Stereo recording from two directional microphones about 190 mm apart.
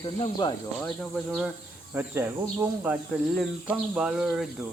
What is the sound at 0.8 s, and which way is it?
Speech, 5° left (ahead or behind).